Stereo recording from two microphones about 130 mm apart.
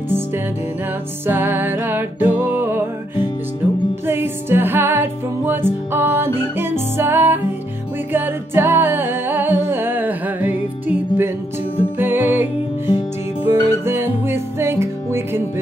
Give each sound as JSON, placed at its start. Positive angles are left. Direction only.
{"t": 1.2, "sound": "music", "side_deg": -15}
{"t": 4.0, "sound": "music", "side_deg": -15}